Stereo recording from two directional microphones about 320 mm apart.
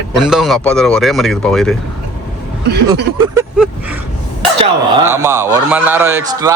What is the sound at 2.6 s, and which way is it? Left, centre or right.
Speech, right.